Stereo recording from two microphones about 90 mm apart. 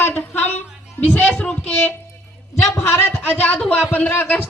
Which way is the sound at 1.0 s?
20° left (ahead or behind).